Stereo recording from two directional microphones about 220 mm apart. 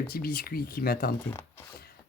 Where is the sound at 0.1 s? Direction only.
40° left (ahead or behind).